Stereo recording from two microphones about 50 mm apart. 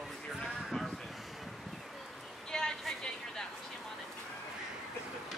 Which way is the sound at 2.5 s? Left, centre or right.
Centre.